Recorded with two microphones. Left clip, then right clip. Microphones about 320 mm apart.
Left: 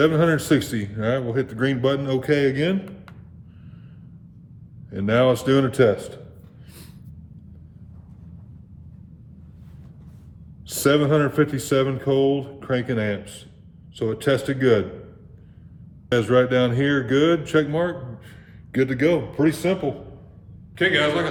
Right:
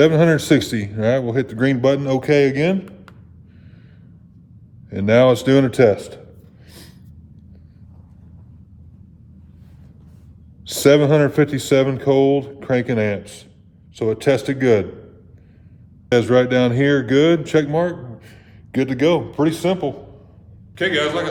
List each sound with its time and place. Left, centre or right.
0.0 s speech: right
4.9 s speech: right
10.7 s speech: centre
16.0 s a man's voice: right
20.7 s a man's voice: centre